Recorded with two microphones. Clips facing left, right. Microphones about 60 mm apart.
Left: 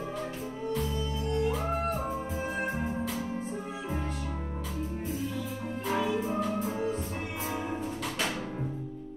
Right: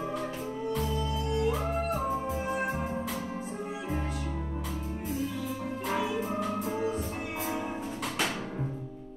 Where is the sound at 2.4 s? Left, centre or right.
Right.